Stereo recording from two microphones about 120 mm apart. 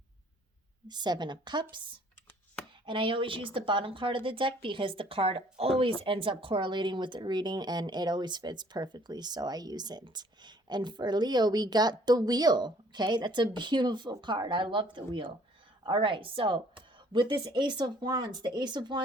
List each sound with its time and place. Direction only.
0.9 s speech: 35° right (ahead or behind)
2.8 s a woman's voice: 45° right (ahead or behind)